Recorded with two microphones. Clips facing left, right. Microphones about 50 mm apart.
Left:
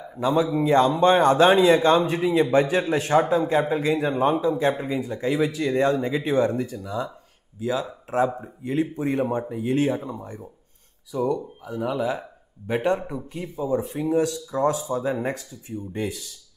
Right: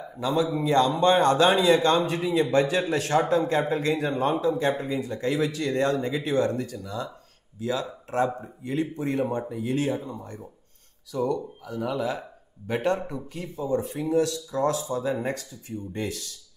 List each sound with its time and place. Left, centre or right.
0.7 s a man's voice: left
14.1 s speech: left
15.1 s a man's voice: centre